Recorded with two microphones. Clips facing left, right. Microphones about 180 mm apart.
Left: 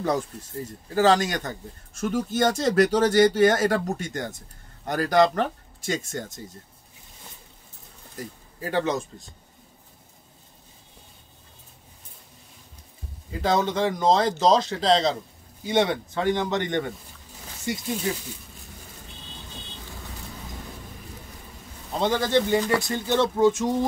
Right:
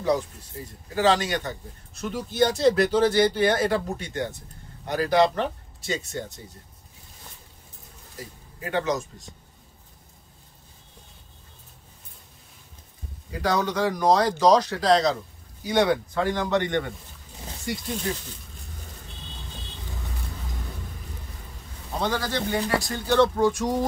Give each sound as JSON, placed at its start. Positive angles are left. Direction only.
{"t": 0.0, "sound": "speech", "side_deg": 50}
{"t": 8.5, "sound": "a man's voice", "side_deg": 30}
{"t": 13.4, "sound": "a man's voice", "side_deg": 25}
{"t": 22.0, "sound": "a man's voice", "side_deg": 25}